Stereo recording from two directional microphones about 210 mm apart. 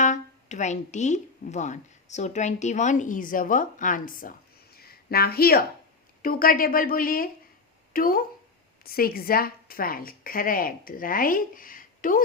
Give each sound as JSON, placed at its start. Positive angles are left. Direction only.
{"t": 0.0, "sound": "a woman's voice", "side_deg": 35}